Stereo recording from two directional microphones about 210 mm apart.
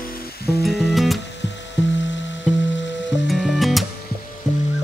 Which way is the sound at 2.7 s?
60° left (ahead or behind).